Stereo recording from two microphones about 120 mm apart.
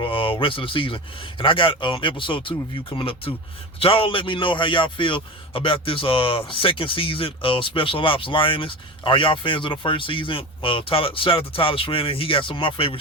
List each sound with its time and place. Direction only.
0.0 s speech: 45° left (ahead or behind)